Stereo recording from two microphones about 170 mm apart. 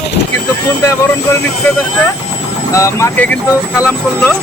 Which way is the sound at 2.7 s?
15° left (ahead or behind).